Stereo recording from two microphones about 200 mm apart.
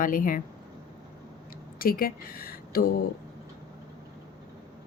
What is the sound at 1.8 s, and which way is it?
A woman's voice, 45° left (ahead or behind).